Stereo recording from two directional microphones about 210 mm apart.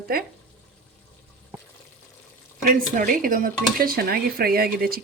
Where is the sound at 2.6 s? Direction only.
40° right (ahead or behind).